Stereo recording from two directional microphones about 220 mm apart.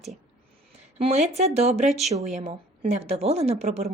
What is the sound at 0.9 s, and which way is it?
A woman's voice, 30° right (ahead or behind).